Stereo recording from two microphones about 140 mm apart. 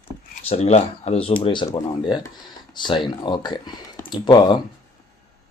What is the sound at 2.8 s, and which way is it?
Speech, 35° left (ahead or behind).